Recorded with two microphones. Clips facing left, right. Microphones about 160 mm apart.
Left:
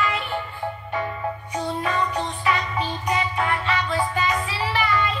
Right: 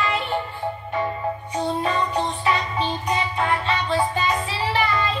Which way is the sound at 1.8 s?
30° right (ahead or behind).